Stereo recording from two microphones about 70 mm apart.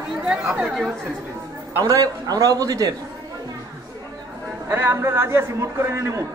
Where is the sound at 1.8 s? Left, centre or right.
Right.